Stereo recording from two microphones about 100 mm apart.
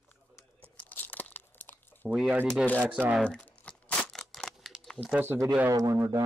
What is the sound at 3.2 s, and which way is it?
Crumpling, 15° left (ahead or behind).